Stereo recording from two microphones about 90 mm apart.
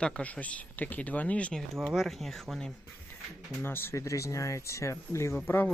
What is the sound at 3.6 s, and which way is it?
Speech, 25° left (ahead or behind).